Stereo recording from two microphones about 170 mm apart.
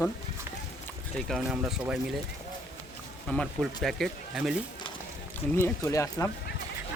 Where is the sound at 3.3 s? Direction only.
5° left (ahead or behind).